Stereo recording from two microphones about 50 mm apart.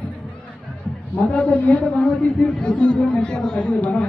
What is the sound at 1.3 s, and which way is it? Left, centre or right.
Speech, left.